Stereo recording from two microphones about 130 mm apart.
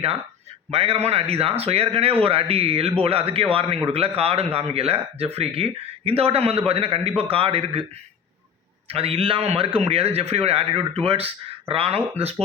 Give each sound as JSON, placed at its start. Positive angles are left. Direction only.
{"t": 0.7, "sound": "speech", "side_deg": -50}
{"t": 8.9, "sound": "speech", "side_deg": -50}